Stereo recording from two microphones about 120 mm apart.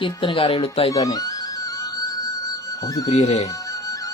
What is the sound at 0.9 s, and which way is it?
Speech, 30° left (ahead or behind).